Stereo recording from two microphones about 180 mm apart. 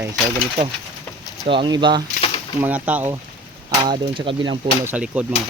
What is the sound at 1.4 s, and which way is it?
Speech, 25° right (ahead or behind).